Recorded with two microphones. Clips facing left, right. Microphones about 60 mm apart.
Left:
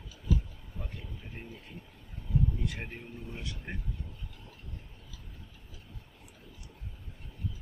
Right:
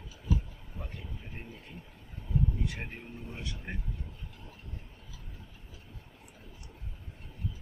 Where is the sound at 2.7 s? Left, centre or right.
Centre.